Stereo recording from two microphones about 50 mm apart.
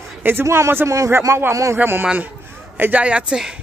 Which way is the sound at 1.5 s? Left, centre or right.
Right.